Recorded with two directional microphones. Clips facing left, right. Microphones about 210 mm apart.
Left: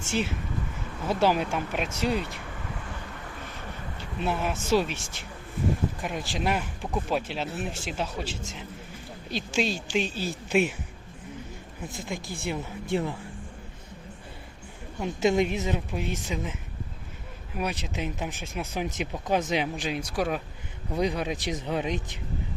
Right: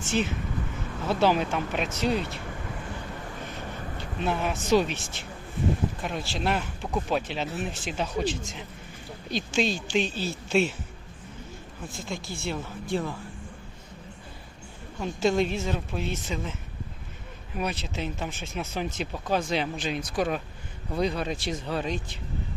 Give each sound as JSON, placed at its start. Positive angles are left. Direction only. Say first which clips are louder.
{"t": 1.0, "sound": "speech", "louder": "right 1 dB", "side_deg": 10}
{"t": 4.2, "sound": "speech", "louder": "right 1 dB", "side_deg": 5}
{"t": 6.0, "sound": "speech", "louder": "even", "side_deg": 10}
{"t": 11.9, "sound": "speech", "louder": "even", "side_deg": 15}
{"t": 14.9, "sound": "speech", "louder": "left 1 dB", "side_deg": 20}
{"t": 17.6, "sound": "speech", "louder": "even", "side_deg": 10}